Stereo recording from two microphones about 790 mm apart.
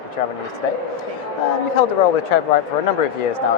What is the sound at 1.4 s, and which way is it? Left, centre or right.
Speech, left.